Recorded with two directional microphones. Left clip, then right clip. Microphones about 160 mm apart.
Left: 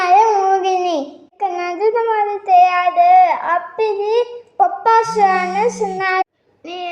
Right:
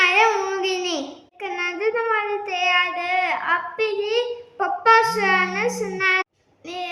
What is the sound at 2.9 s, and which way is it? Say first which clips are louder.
Child singing: left 12 dB; 15° left (ahead or behind).